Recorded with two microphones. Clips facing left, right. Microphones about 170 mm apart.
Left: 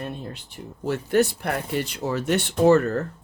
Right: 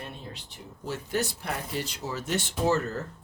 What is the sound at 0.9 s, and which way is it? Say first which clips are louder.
Speech: left 9 dB; 60° left (ahead or behind).